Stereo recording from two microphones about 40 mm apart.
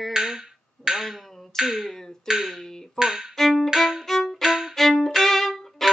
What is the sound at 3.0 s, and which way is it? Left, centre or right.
Music, centre.